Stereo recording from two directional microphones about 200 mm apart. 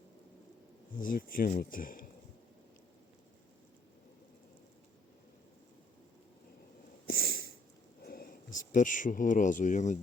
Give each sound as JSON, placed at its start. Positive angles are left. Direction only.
{"t": 0.9, "sound": "speech", "side_deg": 45}
{"t": 7.1, "sound": "sniff", "side_deg": 50}
{"t": 8.0, "sound": "whispering", "side_deg": 50}
{"t": 8.7, "sound": "speech", "side_deg": 40}